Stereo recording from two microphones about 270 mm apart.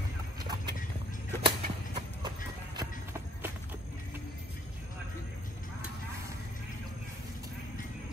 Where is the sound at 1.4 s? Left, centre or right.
Centre.